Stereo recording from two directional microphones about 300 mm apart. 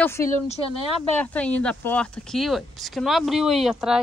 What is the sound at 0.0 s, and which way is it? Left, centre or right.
Speech, centre.